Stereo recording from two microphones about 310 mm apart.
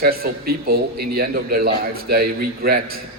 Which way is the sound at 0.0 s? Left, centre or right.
Right.